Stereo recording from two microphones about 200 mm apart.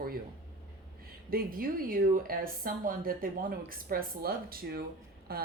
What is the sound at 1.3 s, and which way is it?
Speech, 45° right (ahead or behind).